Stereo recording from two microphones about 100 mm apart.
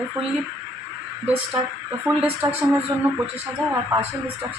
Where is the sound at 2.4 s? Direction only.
35° right (ahead or behind).